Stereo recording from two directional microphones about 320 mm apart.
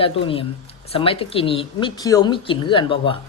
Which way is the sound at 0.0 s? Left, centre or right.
Centre.